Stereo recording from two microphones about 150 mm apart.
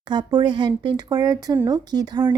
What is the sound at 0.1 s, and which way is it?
Speech, 30° right (ahead or behind).